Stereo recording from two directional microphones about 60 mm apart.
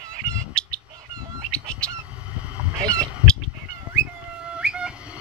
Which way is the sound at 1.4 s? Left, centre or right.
Centre.